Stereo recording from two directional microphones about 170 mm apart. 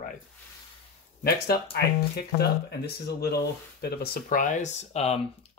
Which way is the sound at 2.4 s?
75° left (ahead or behind).